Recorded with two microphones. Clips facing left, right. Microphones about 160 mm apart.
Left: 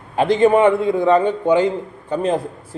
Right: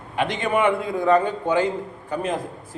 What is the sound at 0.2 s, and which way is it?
A man's voice, 35° left (ahead or behind).